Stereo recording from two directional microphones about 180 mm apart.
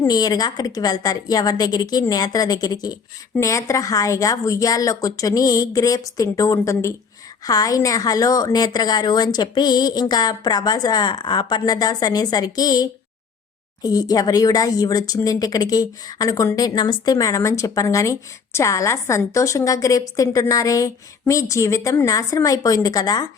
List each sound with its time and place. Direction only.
0.0 s speech: 20° left (ahead or behind)